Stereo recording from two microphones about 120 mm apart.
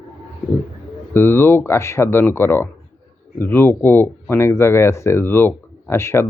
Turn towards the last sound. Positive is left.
turn(degrees=20)  # may be behind; listen again after turning